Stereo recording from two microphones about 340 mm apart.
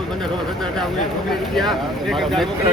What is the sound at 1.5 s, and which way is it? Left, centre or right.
Speech, centre.